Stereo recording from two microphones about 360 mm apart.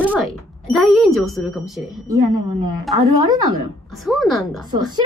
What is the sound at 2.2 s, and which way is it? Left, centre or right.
Speech, right.